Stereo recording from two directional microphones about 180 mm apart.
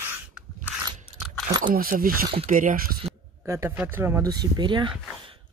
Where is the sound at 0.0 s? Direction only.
10° right (ahead or behind).